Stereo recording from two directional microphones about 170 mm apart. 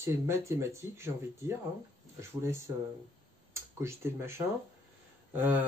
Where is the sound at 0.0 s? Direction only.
15° right (ahead or behind).